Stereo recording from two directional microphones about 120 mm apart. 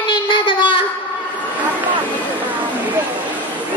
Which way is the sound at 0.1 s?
40° left (ahead or behind).